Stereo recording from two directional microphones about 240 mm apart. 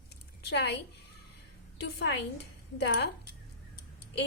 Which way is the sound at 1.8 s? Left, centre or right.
Left.